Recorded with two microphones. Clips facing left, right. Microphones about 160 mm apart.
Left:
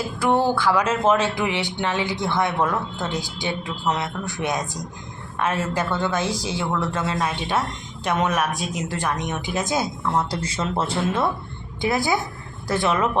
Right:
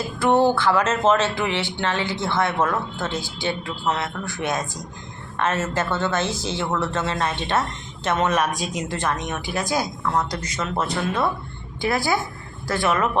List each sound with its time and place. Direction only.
0.2 s speech: 10° left (ahead or behind)